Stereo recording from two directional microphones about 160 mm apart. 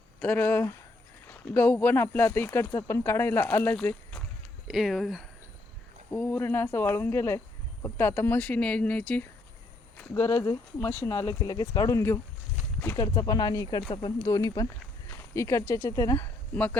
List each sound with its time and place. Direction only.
0.2 s speech: 10° left (ahead or behind)
4.7 s speech: centre (ahead or behind)
6.1 s speech: 10° left (ahead or behind)